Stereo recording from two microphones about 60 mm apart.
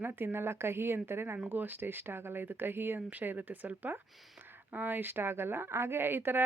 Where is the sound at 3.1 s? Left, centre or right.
Right.